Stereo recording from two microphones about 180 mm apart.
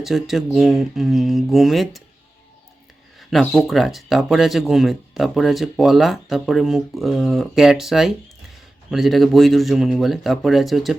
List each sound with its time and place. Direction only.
0.0 s speech: centre (ahead or behind)
3.2 s speech: centre (ahead or behind)